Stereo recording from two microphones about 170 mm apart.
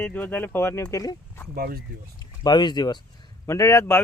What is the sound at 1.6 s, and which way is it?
Speech, 65° right (ahead or behind).